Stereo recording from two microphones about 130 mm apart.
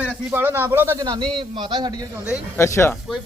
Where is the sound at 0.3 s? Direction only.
15° right (ahead or behind).